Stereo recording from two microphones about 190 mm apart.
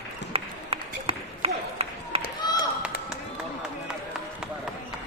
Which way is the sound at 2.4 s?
20° left (ahead or behind).